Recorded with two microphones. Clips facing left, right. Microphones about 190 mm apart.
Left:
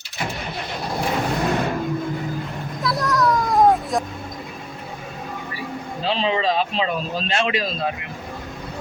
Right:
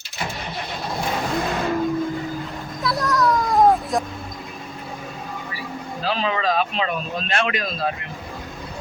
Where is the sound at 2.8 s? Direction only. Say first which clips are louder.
Even; centre (ahead or behind).